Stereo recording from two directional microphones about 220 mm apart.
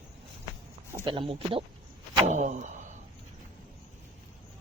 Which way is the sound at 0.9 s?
20° right (ahead or behind).